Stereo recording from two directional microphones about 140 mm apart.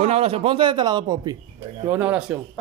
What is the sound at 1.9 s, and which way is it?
Speech, 10° right (ahead or behind).